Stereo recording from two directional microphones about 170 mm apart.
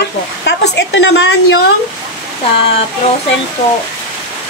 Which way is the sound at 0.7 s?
90° left.